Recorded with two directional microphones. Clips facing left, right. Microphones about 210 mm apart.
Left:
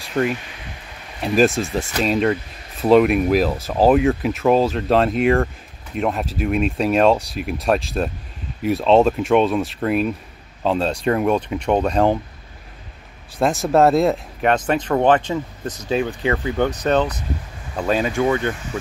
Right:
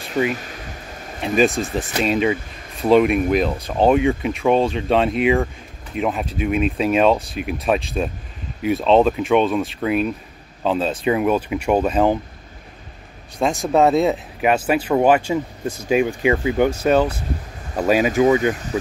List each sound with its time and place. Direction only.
0.0 s speech: centre (ahead or behind)
0.4 s a sound: 40° right (ahead or behind)
1.2 s speech: centre (ahead or behind)
13.4 s speech: centre (ahead or behind)